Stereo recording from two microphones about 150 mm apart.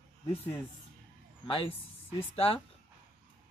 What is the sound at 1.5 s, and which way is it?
Speech, 35° left (ahead or behind).